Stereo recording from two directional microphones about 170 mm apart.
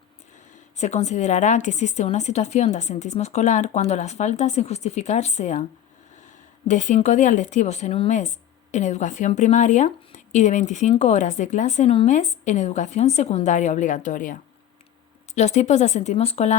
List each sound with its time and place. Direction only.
0.8 s a woman's voice: 40° left (ahead or behind)
6.7 s a woman's voice: 45° left (ahead or behind)
15.4 s a woman's voice: 45° left (ahead or behind)